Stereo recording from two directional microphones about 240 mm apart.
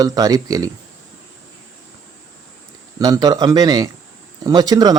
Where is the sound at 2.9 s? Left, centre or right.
Centre.